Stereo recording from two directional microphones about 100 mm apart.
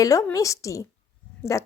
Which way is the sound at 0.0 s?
35° left (ahead or behind).